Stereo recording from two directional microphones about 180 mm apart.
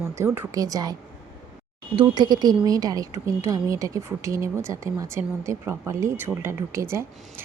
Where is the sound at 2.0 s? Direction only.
25° right (ahead or behind).